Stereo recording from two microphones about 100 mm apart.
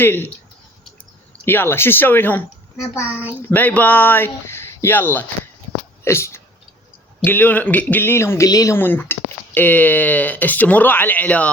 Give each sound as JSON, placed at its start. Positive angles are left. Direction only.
{"t": 0.0, "sound": "speech", "side_deg": 20}
{"t": 1.5, "sound": "speech", "side_deg": 20}
{"t": 3.0, "sound": "a child's voice", "side_deg": -15}
{"t": 3.5, "sound": "speech", "side_deg": 15}
{"t": 8.4, "sound": "speech", "side_deg": 35}
{"t": 8.7, "sound": "speech", "side_deg": 20}